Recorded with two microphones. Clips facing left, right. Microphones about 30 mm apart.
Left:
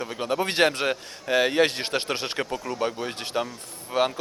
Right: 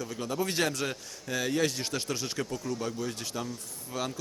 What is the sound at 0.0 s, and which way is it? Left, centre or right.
A man's voice, left.